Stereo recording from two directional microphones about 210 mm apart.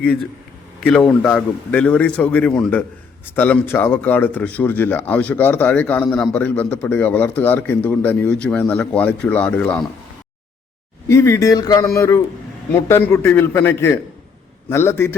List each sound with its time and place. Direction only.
0.9 s speech: 5° left (ahead or behind)
11.1 s speech: 15° left (ahead or behind)